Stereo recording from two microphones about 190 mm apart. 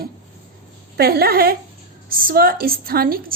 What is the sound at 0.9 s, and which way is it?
A woman's voice, 55° right (ahead or behind).